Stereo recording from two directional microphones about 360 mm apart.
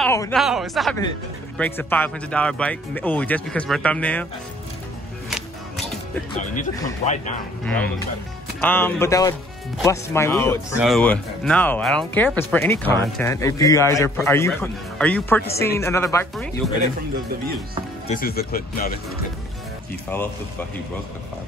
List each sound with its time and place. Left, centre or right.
0.0 s speech: centre
6.4 s speech: left
7.6 s speech: centre
18.0 s speech: left